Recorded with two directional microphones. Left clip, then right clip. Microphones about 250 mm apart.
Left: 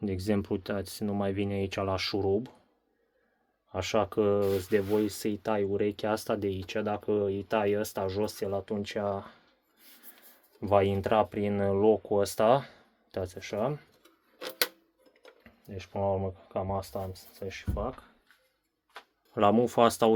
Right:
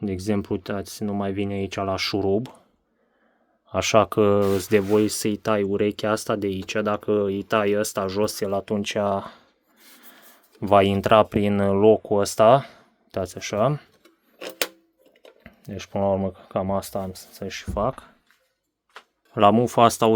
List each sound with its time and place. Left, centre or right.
0.0 s speech: centre
3.7 s speech: right
10.6 s speech: right
15.4 s speech: right
19.3 s speech: right